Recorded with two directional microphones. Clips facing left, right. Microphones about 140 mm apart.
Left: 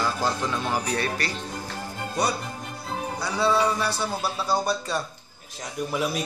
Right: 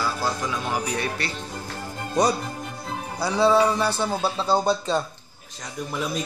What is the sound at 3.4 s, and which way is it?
Speech, 25° right (ahead or behind).